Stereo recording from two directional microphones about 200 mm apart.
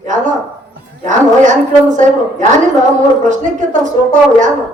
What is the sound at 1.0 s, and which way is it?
A man's voice, 40° right (ahead or behind).